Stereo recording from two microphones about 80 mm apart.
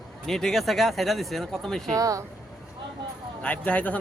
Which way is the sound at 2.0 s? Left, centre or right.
Right.